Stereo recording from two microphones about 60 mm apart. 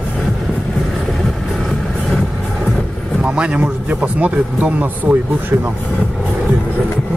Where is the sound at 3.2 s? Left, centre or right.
Centre.